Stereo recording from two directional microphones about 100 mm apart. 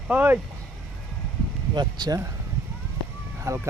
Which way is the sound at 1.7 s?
45° right (ahead or behind).